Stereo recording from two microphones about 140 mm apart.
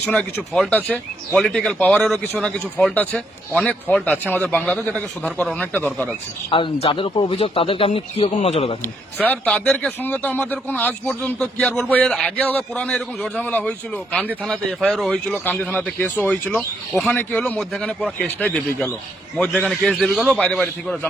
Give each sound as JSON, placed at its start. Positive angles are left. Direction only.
{"t": 0.0, "sound": "a man's voice", "side_deg": 5}
{"t": 6.5, "sound": "speech", "side_deg": 40}
{"t": 8.8, "sound": "a man's voice", "side_deg": 10}